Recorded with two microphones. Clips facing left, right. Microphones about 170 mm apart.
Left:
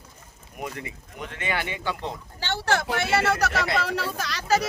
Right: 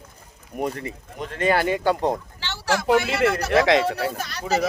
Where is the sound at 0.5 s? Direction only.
40° right (ahead or behind).